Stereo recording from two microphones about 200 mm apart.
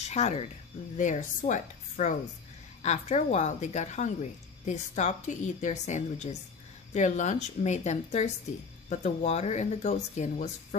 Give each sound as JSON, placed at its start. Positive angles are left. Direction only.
{"t": 0.0, "sound": "speech", "side_deg": 35}